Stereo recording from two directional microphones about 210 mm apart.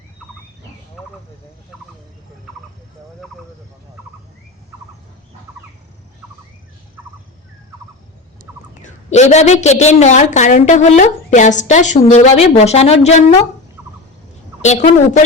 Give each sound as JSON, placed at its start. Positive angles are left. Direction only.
{"t": 8.8, "sound": "a woman's voice", "side_deg": 35}
{"t": 14.6, "sound": "a woman's voice", "side_deg": 35}